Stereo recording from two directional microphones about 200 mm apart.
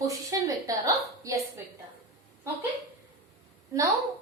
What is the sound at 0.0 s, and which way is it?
A woman's voice, 15° right (ahead or behind).